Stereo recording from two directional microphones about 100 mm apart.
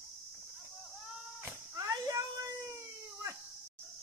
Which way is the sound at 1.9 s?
35° right (ahead or behind).